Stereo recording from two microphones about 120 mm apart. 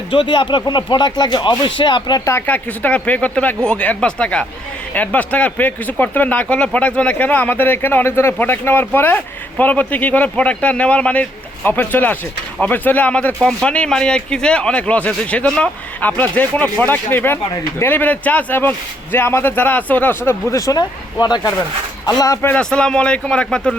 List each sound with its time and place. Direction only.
0.1 s speech: 45° left (ahead or behind)
2.2 s speech: 15° left (ahead or behind); by 22.4 s 30° left (ahead or behind)
22.4 s speech: 15° left (ahead or behind)